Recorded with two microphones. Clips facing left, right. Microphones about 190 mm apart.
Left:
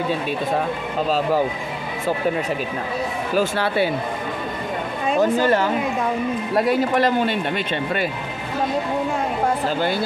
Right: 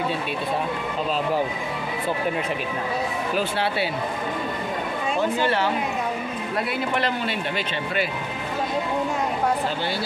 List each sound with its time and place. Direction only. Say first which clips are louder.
3.3 s speech: left 6 dB; 45° left (ahead or behind)
5.2 s speech: left 5 dB; 45° left (ahead or behind)